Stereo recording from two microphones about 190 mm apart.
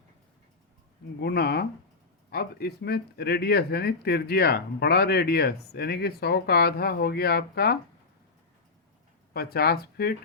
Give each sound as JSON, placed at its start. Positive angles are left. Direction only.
{"t": 1.2, "sound": "speech", "side_deg": 55}
{"t": 9.3, "sound": "speech", "side_deg": 55}